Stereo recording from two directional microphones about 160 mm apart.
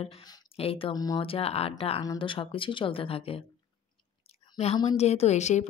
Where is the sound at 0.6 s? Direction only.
35° left (ahead or behind).